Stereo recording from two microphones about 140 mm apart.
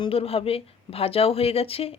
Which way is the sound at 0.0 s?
45° left (ahead or behind).